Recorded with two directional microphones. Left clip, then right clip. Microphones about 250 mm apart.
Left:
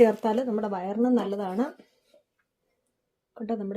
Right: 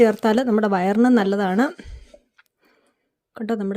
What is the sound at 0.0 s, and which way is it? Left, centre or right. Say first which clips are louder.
A woman's voice: right 4 dB; right.